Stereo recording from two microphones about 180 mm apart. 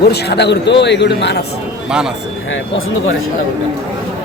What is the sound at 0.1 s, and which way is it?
A man's voice, 70° left (ahead or behind).